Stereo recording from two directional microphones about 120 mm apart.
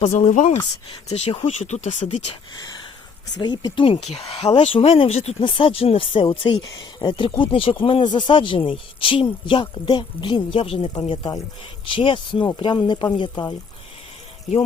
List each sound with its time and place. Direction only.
0.0 s speech: 65° left (ahead or behind); by 0.6 s 80° left
1.0 s speech: 60° left (ahead or behind)
3.3 s speech: 40° left (ahead or behind)
4.0 s speech: 55° left (ahead or behind)
5.4 s speech: 45° left (ahead or behind)